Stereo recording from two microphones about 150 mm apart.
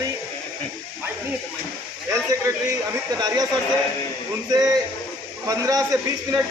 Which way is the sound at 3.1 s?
25° right (ahead or behind).